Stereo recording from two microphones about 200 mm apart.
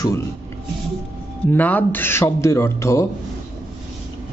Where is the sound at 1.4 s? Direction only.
10° left (ahead or behind).